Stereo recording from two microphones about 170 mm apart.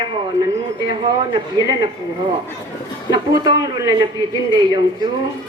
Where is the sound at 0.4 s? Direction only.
25° right (ahead or behind).